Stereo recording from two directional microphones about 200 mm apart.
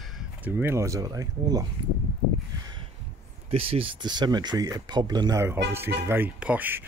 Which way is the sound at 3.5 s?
25° right (ahead or behind).